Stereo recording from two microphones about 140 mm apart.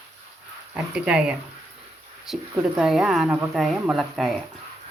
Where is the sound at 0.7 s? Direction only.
5° right (ahead or behind).